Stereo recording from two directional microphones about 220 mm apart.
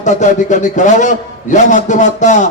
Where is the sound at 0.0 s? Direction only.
35° left (ahead or behind).